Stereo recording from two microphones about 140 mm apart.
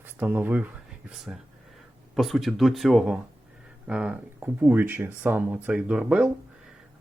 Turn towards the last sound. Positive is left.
turn(degrees=-5)  # may be behind; listen again after turning